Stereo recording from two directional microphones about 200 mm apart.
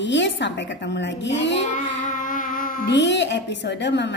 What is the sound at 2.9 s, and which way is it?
A woman's voice, 60° left (ahead or behind).